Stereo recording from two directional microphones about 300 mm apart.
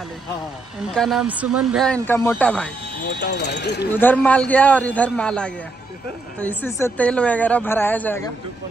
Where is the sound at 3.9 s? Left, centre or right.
Centre.